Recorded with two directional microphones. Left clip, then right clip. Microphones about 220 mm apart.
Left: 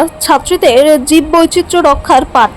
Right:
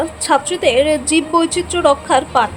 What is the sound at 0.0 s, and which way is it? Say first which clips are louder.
A woman's voice: left 6 dB; 20° left (ahead or behind).